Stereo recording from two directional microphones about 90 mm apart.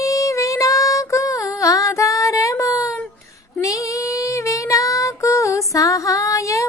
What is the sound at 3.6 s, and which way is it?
Child singing, 40° left (ahead or behind).